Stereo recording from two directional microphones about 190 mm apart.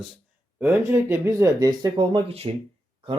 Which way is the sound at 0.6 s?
10° right (ahead or behind).